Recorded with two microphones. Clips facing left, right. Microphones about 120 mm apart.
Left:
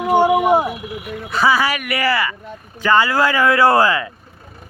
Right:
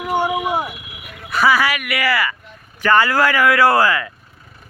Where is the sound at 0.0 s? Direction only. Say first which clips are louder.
Left 6 dB; 35° left (ahead or behind).